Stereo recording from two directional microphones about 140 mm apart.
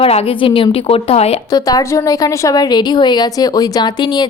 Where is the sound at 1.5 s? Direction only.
25° left (ahead or behind).